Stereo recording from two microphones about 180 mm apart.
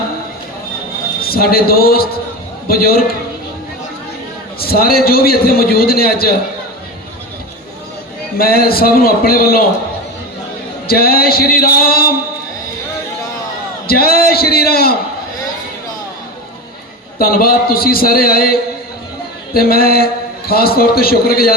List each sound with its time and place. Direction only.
1.2 s a man's voice: 55° left (ahead or behind)
4.6 s a man's voice: 55° left (ahead or behind)
8.4 s a man's voice: 55° left (ahead or behind)
10.8 s a man's voice: 55° left (ahead or behind)
13.8 s a man's voice: 55° left (ahead or behind)
17.2 s a man's voice: 55° left (ahead or behind)
19.5 s a man's voice: 55° left (ahead or behind)